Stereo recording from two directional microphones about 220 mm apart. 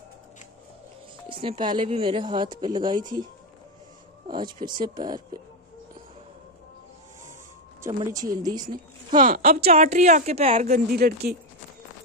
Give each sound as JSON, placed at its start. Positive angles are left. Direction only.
{"t": 1.3, "sound": "speech", "side_deg": -25}
{"t": 4.5, "sound": "speech", "side_deg": -20}
{"t": 7.8, "sound": "speech", "side_deg": -15}
{"t": 9.1, "sound": "a woman's voice", "side_deg": -40}
{"t": 9.6, "sound": "speech", "side_deg": -30}
{"t": 10.7, "sound": "speech", "side_deg": -45}